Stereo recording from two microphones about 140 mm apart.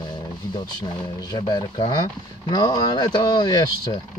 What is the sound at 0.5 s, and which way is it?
Speech, 30° left (ahead or behind).